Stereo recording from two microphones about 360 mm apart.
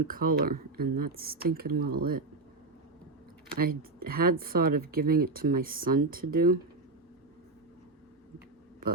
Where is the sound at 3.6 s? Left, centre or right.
Right.